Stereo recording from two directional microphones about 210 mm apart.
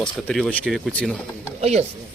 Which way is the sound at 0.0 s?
Centre (ahead or behind).